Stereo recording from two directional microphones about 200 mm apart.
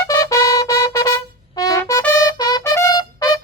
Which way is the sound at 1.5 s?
15° left (ahead or behind).